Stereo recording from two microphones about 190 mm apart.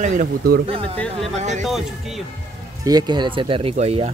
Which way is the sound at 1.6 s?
Centre (ahead or behind).